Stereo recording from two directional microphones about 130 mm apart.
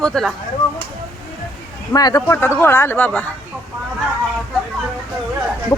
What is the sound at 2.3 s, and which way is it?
Speech, 20° left (ahead or behind).